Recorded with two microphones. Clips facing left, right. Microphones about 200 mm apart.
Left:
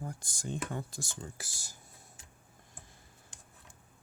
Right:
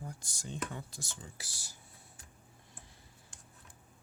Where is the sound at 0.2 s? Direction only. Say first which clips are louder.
Left 3 dB; 50° left (ahead or behind).